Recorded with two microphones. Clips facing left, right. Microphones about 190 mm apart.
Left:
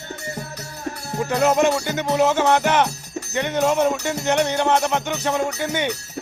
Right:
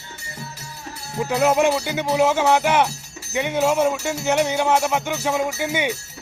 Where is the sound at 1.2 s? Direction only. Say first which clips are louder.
Even; 5° right (ahead or behind).